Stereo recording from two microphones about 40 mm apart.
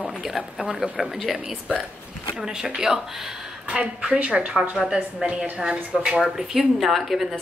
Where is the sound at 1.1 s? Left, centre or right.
Centre.